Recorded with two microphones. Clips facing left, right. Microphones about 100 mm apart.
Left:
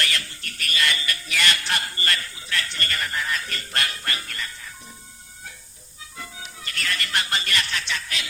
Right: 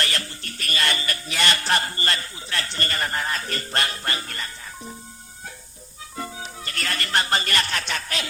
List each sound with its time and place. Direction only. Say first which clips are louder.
0.0 s music: right 1 dB; 35° right (ahead or behind)
6.1 s music: right 6 dB; 40° right (ahead or behind)